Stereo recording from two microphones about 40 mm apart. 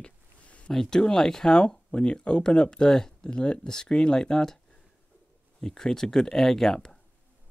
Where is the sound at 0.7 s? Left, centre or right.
Centre.